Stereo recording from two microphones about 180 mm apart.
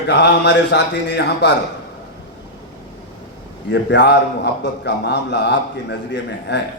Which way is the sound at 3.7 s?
70° left (ahead or behind).